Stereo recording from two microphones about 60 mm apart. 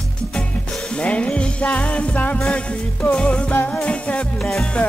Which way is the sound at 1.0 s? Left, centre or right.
Centre.